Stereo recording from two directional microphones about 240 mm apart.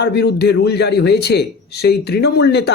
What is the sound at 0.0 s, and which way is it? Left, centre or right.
A man's voice, left.